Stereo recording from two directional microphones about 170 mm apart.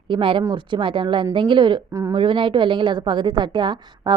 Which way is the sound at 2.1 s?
30° right (ahead or behind).